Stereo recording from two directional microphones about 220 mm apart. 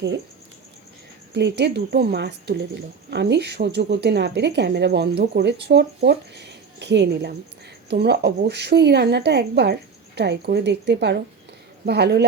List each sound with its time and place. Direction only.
1.3 s a woman's voice: 50° right (ahead or behind)